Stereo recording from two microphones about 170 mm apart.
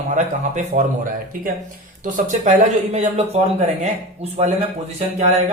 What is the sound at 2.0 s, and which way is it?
A man's voice, 50° right (ahead or behind).